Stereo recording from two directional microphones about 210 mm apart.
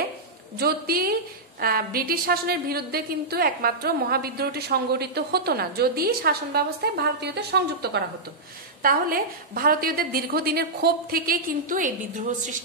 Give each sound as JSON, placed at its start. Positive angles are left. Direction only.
{"t": 0.6, "sound": "a woman's voice", "side_deg": -45}